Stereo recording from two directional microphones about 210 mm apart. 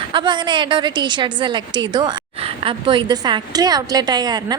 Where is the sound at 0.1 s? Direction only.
20° right (ahead or behind).